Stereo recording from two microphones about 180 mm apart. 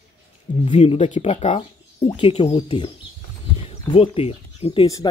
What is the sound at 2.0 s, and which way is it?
Speech, 25° left (ahead or behind).